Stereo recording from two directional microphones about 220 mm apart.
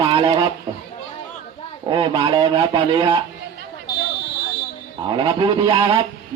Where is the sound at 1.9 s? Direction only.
20° right (ahead or behind).